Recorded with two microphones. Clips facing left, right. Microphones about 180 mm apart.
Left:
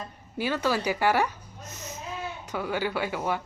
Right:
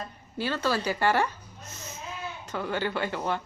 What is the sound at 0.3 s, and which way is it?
Speech, 15° left (ahead or behind).